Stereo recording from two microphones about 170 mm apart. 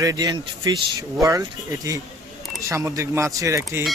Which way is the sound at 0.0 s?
20° right (ahead or behind).